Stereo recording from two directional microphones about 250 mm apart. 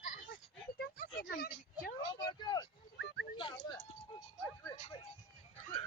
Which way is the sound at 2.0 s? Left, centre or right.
Centre.